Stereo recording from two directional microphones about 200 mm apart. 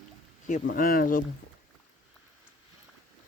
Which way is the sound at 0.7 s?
45° left (ahead or behind).